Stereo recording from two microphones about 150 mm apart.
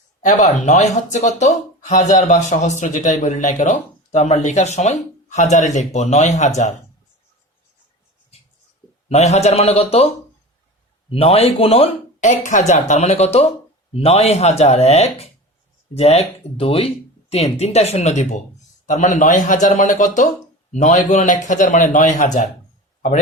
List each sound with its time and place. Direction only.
0.2 s speech: 55° left (ahead or behind)
9.0 s speech: 45° left (ahead or behind)
11.1 s a man's voice: 40° left (ahead or behind); by 22.4 s 55° left (ahead or behind)